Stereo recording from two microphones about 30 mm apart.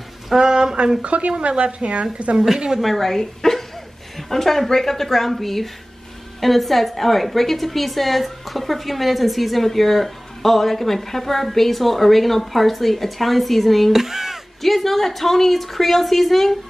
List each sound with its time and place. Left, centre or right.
0.4 s speech: right
1.3 s speech: right
2.8 s a woman's voice: centre
13.9 s a sound: centre
14.6 s a woman's voice: centre